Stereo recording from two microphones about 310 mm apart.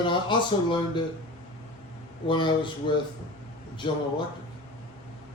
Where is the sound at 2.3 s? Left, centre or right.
Centre.